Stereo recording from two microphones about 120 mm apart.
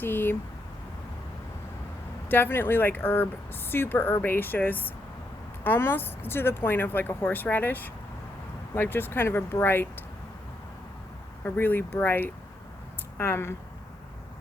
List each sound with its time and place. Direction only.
0.0 s speech: 15° left (ahead or behind)
2.3 s speech: 20° left (ahead or behind)
11.4 s speech: 15° left (ahead or behind)